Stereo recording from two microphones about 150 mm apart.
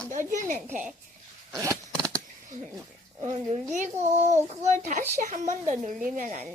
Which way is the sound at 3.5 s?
50° right (ahead or behind).